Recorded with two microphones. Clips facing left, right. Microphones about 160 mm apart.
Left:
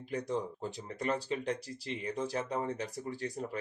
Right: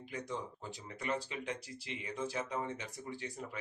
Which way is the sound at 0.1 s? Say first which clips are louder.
Left 7 dB; 35° left (ahead or behind).